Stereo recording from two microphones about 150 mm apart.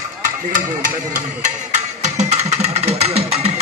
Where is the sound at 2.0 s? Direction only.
50° right (ahead or behind).